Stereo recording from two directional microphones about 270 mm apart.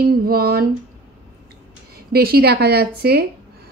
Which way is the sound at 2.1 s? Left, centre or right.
Right.